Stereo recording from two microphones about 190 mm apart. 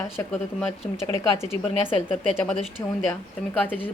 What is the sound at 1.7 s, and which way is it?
Speech, 30° left (ahead or behind).